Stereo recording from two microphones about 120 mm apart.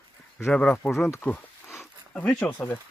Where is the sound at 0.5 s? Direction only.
10° left (ahead or behind).